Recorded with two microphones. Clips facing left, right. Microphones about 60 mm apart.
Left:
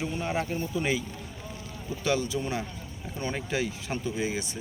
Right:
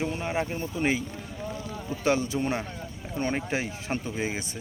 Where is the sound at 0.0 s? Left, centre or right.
Right.